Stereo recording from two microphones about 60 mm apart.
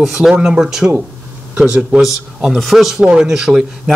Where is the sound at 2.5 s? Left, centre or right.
Centre.